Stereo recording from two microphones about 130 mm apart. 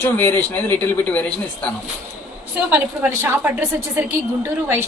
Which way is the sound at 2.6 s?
15° right (ahead or behind).